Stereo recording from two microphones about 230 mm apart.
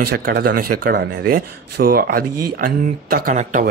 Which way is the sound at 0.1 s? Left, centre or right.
Right.